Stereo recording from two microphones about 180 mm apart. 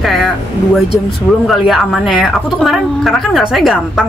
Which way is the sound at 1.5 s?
Centre (ahead or behind).